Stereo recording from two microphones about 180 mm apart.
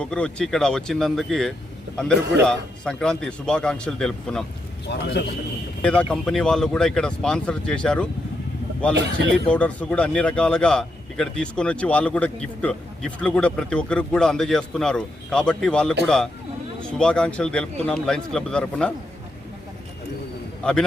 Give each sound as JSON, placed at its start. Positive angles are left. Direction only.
{"t": 0.0, "sound": "speech", "side_deg": 5}
{"t": 4.9, "sound": "a man's voice", "side_deg": 70}
{"t": 5.8, "sound": "speech", "side_deg": 5}
{"t": 9.0, "sound": "speech", "side_deg": -75}
{"t": 9.3, "sound": "speech", "side_deg": 5}
{"t": 20.6, "sound": "speech", "side_deg": 5}